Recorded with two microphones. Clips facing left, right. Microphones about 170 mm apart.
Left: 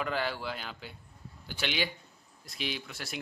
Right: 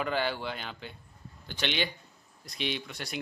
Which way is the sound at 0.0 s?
Centre (ahead or behind).